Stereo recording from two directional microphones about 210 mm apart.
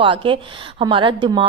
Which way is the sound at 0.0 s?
25° right (ahead or behind).